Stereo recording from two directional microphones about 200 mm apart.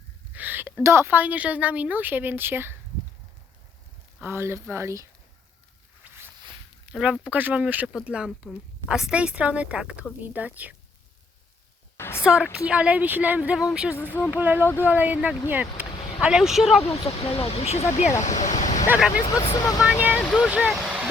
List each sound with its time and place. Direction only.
0.3 s speech: 10° right (ahead or behind)
4.2 s speech: 10° right (ahead or behind)
6.9 s speech: 5° right (ahead or behind)
11.9 s a sound: 10° left (ahead or behind)
12.2 s speech: 5° right (ahead or behind)
13.9 s speech: 10° left (ahead or behind)
14.3 s speech: 10° right (ahead or behind)
14.6 s speech: 10° left (ahead or behind)
14.8 s speech: 10° right (ahead or behind)
17.2 s speech: 30° left (ahead or behind)
18.9 s speech: 5° right (ahead or behind)
19.2 s speech: 20° left (ahead or behind)
19.8 s speech: 5° right (ahead or behind)